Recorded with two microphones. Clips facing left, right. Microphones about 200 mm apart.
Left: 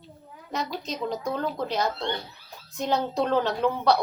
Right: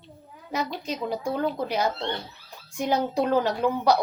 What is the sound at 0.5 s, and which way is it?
A woman's voice, 10° right (ahead or behind).